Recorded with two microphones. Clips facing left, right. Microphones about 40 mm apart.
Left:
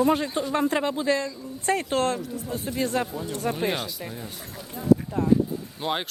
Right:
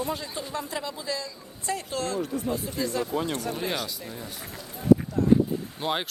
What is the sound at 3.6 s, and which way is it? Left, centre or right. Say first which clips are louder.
Speech: left 3 dB; left.